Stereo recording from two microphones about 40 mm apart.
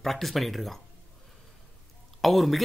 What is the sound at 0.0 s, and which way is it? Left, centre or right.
Speech, centre.